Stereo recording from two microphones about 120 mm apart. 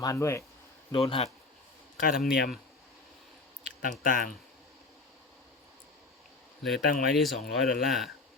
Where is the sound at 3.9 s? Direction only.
90° left.